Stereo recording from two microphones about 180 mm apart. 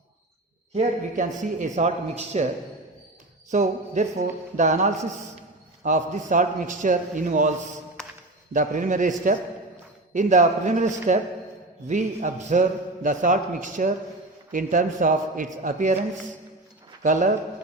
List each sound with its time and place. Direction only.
0.7 s a man's voice: 45° right (ahead or behind)
3.5 s a man's voice: 40° right (ahead or behind)
8.5 s a man's voice: 45° right (ahead or behind)
17.0 s a man's voice: 45° right (ahead or behind)